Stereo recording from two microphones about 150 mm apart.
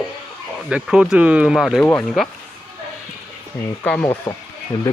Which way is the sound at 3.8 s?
15° left (ahead or behind).